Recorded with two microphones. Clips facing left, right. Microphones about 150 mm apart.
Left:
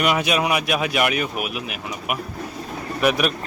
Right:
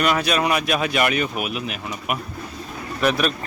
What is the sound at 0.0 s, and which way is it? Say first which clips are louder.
Speech: even; 15° left (ahead or behind).